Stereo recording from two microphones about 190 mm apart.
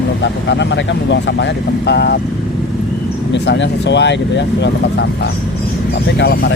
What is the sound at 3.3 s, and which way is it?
Speech, 70° left (ahead or behind).